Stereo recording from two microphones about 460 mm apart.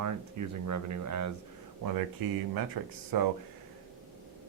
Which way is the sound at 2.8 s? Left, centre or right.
Right.